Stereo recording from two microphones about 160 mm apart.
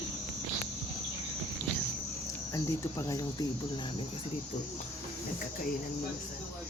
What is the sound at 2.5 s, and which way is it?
Speech, 20° left (ahead or behind).